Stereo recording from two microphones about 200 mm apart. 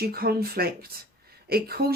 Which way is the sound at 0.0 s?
50° right (ahead or behind).